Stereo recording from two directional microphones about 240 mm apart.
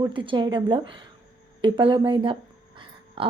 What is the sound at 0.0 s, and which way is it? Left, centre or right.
A woman's voice, centre.